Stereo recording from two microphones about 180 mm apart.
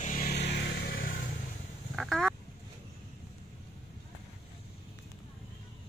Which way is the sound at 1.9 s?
Centre (ahead or behind).